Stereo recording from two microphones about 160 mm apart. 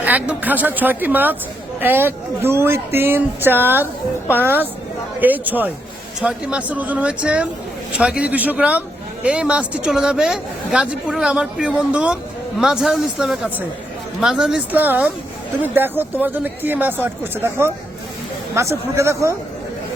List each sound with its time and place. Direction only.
0.0 s a woman's voice: 10° right (ahead or behind)